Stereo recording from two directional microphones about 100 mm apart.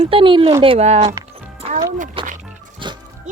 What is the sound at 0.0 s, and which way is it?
Speech, 60° right (ahead or behind).